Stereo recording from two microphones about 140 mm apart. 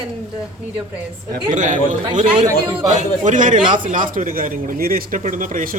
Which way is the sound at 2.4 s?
30° right (ahead or behind).